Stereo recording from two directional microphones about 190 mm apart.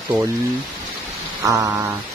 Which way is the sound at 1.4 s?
15° right (ahead or behind).